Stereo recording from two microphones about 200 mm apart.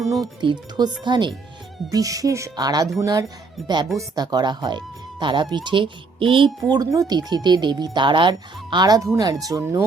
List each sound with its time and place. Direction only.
0.2 s speech: 20° right (ahead or behind)